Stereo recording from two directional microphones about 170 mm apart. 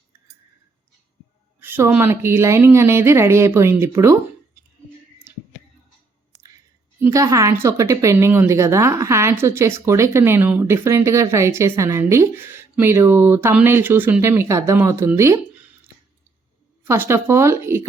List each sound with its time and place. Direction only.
1.6 s a woman's voice: 10° right (ahead or behind)
7.0 s a woman's voice: 20° right (ahead or behind)
16.8 s a woman's voice: 15° right (ahead or behind)